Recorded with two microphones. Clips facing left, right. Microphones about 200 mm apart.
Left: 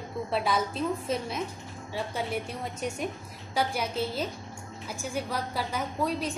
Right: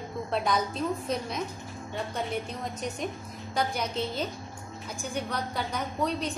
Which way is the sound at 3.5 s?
5° left (ahead or behind).